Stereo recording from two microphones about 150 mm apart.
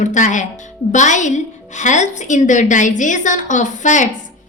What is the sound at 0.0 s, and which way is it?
A woman's voice, 55° left (ahead or behind).